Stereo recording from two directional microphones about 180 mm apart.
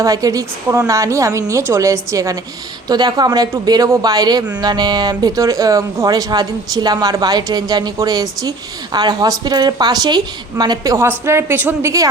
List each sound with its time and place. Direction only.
0.0 s a woman's voice: 20° right (ahead or behind)